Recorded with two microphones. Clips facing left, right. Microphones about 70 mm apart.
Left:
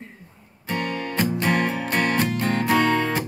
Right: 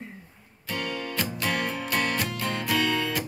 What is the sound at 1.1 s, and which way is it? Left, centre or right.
Music, left.